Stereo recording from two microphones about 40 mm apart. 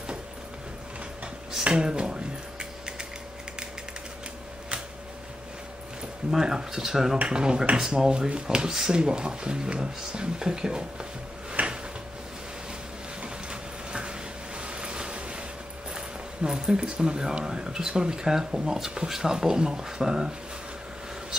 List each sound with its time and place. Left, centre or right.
1.6 s speech: right
6.3 s speech: centre
11.6 s drawer open or close: right
13.2 s a sound: right
16.4 s speech: centre